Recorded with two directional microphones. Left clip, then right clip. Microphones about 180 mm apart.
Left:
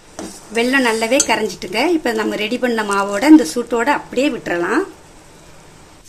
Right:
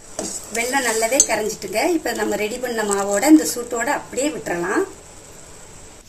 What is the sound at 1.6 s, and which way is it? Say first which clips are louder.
A woman's voice: left 3 dB; 50° left (ahead or behind).